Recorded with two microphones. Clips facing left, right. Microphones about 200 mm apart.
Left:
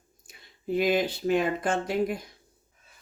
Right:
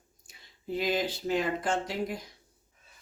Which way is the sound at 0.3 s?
55° left (ahead or behind).